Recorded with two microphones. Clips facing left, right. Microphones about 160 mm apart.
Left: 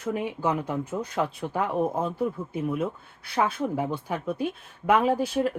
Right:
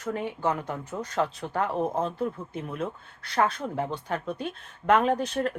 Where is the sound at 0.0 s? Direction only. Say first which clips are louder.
Left 1 dB; 10° left (ahead or behind).